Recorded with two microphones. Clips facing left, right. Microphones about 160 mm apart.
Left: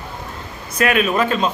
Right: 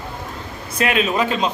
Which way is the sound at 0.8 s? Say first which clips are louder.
Left 2 dB; 25° right (ahead or behind).